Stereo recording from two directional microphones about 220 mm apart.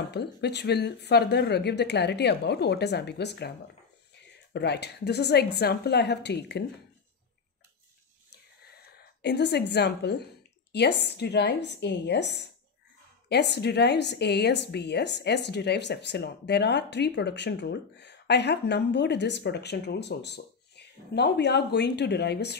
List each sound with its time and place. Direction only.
0.1 s a woman's voice: 50° left (ahead or behind)
8.3 s a sound: 45° left (ahead or behind)
10.7 s a woman's voice: 50° left (ahead or behind)